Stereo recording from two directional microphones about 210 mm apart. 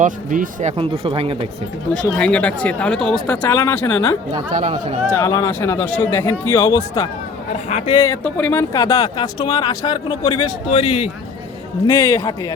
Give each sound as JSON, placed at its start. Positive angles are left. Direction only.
{"t": 0.0, "sound": "speech", "side_deg": -35}
{"t": 0.8, "sound": "speech", "side_deg": -25}
{"t": 1.9, "sound": "speech", "side_deg": 5}
{"t": 4.6, "sound": "speech", "side_deg": -30}
{"t": 5.0, "sound": "speech", "side_deg": 10}
{"t": 7.5, "sound": "speech", "side_deg": 30}
{"t": 7.9, "sound": "speech", "side_deg": 15}
{"t": 11.9, "sound": "speech", "side_deg": 15}